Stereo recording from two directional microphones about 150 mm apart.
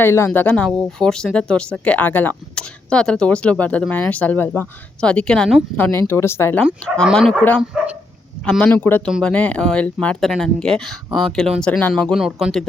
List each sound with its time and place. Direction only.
0.0 s speech: 15° left (ahead or behind); by 7.4 s centre (ahead or behind)
8.4 s speech: 10° left (ahead or behind)
12.1 s speech: centre (ahead or behind)